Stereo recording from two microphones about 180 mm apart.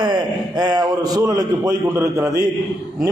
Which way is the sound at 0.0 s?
25° right (ahead or behind).